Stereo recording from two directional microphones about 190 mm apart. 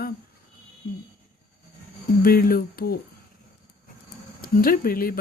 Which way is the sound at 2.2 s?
50° left (ahead or behind).